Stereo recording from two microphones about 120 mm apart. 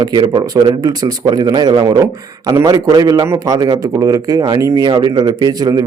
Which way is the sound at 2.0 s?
25° right (ahead or behind).